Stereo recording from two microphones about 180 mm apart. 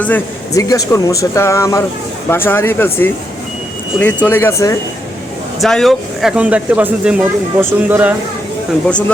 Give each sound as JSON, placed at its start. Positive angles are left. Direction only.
{"t": 0.0, "sound": "speech", "side_deg": 15}
{"t": 5.5, "sound": "speech", "side_deg": 0}
{"t": 8.9, "sound": "speech", "side_deg": 5}